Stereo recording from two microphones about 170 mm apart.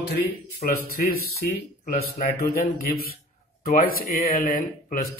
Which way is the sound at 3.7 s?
55° left (ahead or behind).